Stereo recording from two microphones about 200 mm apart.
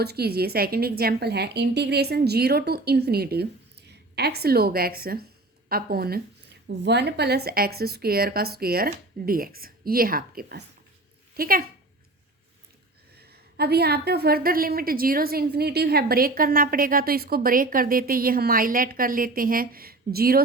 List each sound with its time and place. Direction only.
0.0 s a woman's voice: 55° right (ahead or behind)
13.1 s a woman's voice: 55° right (ahead or behind)